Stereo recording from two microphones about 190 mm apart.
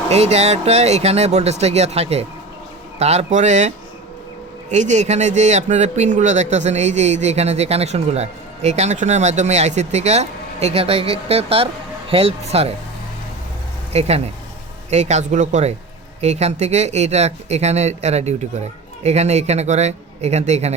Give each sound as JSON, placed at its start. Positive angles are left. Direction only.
{"t": 0.1, "sound": "speech", "side_deg": -35}
{"t": 4.7, "sound": "speech", "side_deg": -40}
{"t": 13.9, "sound": "speech", "side_deg": -35}